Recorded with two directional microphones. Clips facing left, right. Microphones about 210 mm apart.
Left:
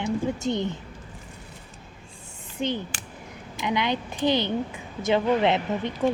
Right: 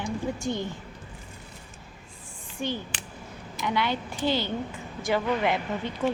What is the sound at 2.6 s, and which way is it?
Speech, 20° left (ahead or behind).